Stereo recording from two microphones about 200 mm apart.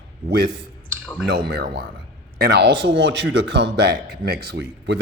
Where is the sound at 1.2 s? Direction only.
55° right (ahead or behind).